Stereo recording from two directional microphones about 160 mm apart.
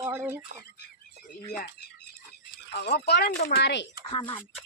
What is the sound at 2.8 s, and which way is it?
Speech, 90° left.